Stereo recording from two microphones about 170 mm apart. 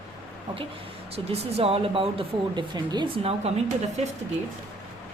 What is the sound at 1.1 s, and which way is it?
A woman's voice, 35° right (ahead or behind).